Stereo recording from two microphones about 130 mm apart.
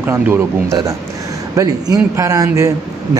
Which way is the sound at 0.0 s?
20° right (ahead or behind).